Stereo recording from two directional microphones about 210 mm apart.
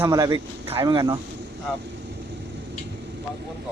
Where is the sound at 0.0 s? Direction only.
15° right (ahead or behind).